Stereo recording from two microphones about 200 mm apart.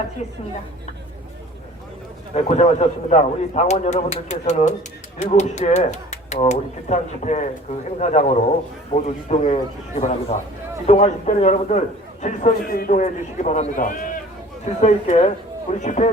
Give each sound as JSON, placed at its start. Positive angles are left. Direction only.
{"t": 2.3, "sound": "speech", "side_deg": 35}